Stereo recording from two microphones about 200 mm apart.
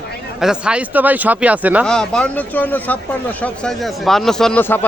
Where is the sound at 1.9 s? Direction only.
5° left (ahead or behind).